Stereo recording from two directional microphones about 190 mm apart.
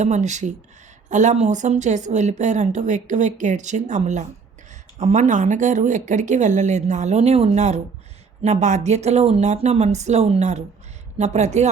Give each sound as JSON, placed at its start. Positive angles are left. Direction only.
{"t": 0.0, "sound": "a woman's voice", "side_deg": -40}